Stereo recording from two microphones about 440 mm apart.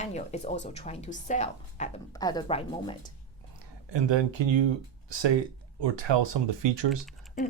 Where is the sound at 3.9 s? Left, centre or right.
Right.